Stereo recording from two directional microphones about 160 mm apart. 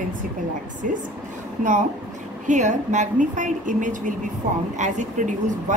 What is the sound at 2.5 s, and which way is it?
A woman's voice, 50° right (ahead or behind).